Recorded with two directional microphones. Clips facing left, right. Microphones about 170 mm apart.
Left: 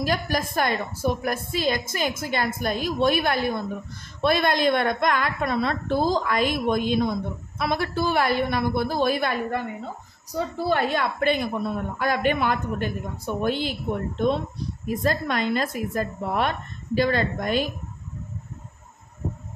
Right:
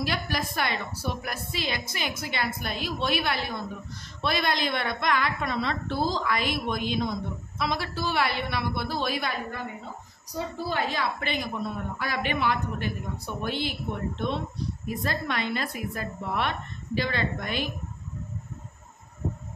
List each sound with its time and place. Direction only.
0.0 s a woman's voice: 45° left (ahead or behind)
10.7 s a woman's voice: 55° left (ahead or behind)